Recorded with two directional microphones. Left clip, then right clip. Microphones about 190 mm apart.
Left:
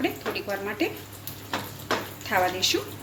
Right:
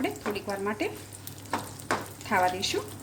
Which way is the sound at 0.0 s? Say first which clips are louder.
Left 3 dB; 50° right (ahead or behind).